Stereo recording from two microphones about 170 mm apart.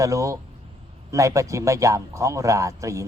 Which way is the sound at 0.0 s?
20° right (ahead or behind).